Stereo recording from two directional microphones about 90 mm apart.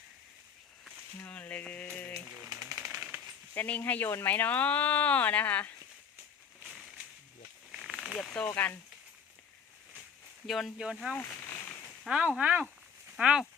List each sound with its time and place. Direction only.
1.2 s a sound: 15° left (ahead or behind)
2.7 s typewriter: 30° right (ahead or behind)
3.5 s speech: 20° left (ahead or behind)
6.6 s a sound: 5° right (ahead or behind)
7.7 s snake: 5° right (ahead or behind)
8.1 s speech: 10° left (ahead or behind)
10.4 s speech: centre (ahead or behind)
11.2 s a sound: 30° left (ahead or behind)
12.0 s speech: 10° right (ahead or behind)